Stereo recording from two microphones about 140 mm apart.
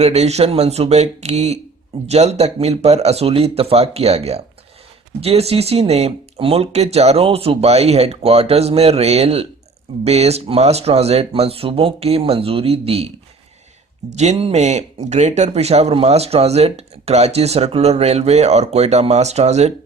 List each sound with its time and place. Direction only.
0.0 s speech: 50° right (ahead or behind)
14.2 s speech: 50° right (ahead or behind)